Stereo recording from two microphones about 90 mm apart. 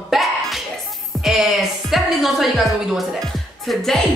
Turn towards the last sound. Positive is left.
turn(degrees=5)  # may be behind; listen again after turning